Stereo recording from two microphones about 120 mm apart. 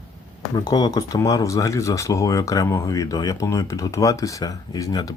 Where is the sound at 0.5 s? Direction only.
35° left (ahead or behind).